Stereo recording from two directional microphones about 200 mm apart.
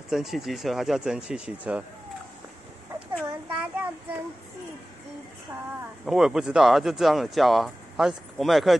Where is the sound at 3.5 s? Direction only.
10° right (ahead or behind).